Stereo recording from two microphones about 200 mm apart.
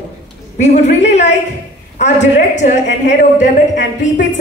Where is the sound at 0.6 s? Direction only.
35° left (ahead or behind).